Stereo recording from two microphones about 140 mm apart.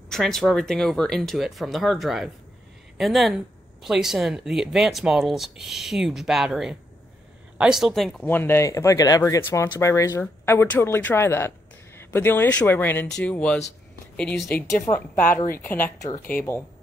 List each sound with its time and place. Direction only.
0.1 s speech: centre (ahead or behind)
8.3 s speech: 15° left (ahead or behind)
14.8 s speech: 15° left (ahead or behind)